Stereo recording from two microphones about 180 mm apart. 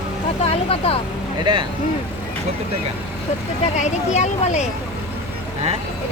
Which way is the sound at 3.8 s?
40° left (ahead or behind).